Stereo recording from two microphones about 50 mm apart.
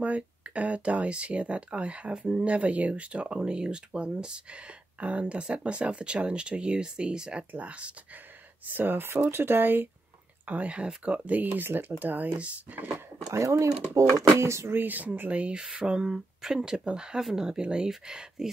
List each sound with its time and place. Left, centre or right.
0.0 s speech: right
2.1 s speech: centre
2.4 s speech: right
8.7 s speech: right
10.4 s speech: right
13.3 s speech: right
14.7 s speech: right; by 18.5 s centre